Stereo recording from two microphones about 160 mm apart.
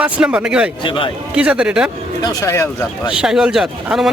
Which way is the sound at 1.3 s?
5° right (ahead or behind).